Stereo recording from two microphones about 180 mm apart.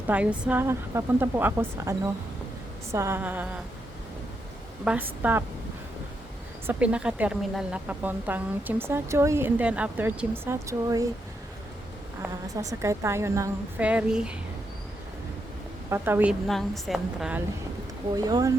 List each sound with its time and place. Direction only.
0.1 s a woman's voice: 5° right (ahead or behind)
4.9 s a woman's voice: 10° right (ahead or behind)
6.7 s a woman's voice: 5° right (ahead or behind)
12.5 s a woman's voice: 15° right (ahead or behind)
15.9 s a woman's voice: 10° right (ahead or behind)
16.5 s a woman's voice: centre (ahead or behind)
18.1 s speech: 20° right (ahead or behind)